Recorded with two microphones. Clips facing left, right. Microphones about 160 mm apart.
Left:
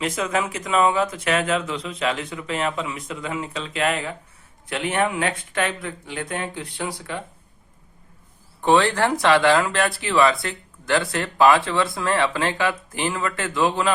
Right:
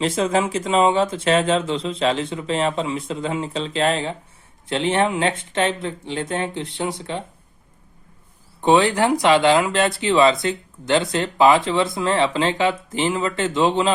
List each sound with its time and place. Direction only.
0.0 s speech: 30° right (ahead or behind)
8.6 s speech: 15° right (ahead or behind)